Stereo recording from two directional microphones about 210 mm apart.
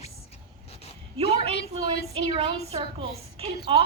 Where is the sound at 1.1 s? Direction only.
25° right (ahead or behind).